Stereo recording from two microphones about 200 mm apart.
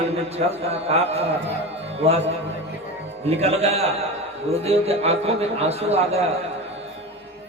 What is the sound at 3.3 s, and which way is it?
A man's voice, 30° right (ahead or behind).